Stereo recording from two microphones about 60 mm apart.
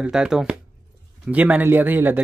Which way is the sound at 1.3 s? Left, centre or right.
Right.